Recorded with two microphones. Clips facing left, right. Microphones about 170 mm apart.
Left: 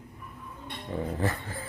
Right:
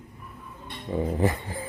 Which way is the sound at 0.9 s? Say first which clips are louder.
Right 5 dB; 15° right (ahead or behind).